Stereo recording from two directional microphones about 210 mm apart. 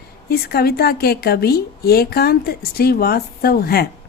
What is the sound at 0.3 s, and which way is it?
A woman's voice, 50° left (ahead or behind).